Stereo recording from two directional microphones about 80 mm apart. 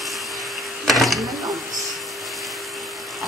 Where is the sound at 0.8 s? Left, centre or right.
Centre.